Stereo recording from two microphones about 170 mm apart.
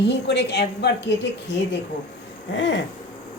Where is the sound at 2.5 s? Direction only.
90° left.